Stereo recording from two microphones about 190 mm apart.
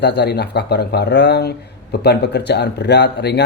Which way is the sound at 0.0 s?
60° left (ahead or behind).